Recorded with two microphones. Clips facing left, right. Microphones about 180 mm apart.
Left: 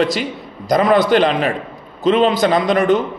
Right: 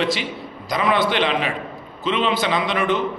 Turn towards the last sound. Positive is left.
turn(degrees=40)  # may be behind; listen again after turning